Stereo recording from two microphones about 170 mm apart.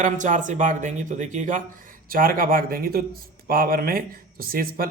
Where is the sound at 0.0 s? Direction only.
50° right (ahead or behind).